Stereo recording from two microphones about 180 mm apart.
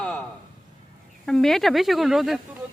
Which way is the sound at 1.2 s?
5° left (ahead or behind).